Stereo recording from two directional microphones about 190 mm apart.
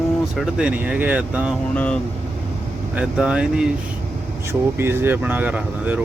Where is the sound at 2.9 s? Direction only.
5° right (ahead or behind).